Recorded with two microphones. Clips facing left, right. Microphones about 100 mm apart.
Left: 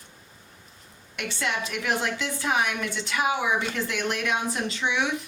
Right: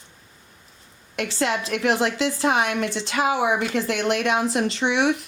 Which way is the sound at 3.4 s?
85° right.